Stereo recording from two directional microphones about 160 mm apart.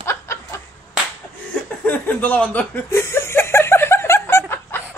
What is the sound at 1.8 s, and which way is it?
Chuckle, 10° left (ahead or behind).